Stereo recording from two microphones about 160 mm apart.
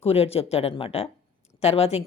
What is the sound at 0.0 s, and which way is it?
Speech, 40° left (ahead or behind).